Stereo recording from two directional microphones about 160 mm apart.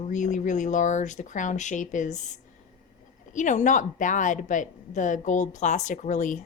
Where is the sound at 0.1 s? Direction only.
50° left (ahead or behind).